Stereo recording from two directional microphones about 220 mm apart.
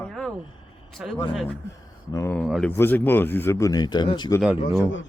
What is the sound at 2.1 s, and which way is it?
Speech, 10° left (ahead or behind).